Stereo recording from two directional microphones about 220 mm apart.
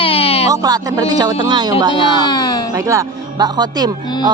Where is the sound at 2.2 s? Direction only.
20° left (ahead or behind).